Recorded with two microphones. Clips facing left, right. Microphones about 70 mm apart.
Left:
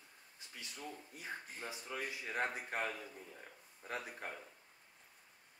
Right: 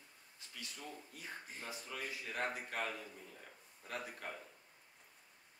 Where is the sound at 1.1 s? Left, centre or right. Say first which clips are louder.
Left 2 dB; left.